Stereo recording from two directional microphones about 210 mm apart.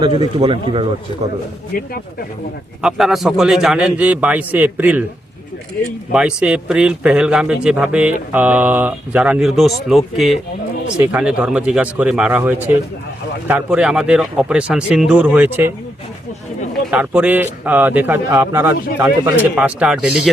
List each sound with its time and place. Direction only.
0.0 s speech: 25° right (ahead or behind)
1.7 s speech: 45° left (ahead or behind)
2.8 s a man's voice: centre (ahead or behind)
6.1 s a man's voice: 5° right (ahead or behind)
16.9 s a man's voice: 5° right (ahead or behind)